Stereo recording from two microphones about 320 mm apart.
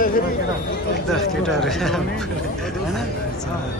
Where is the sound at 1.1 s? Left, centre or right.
Centre.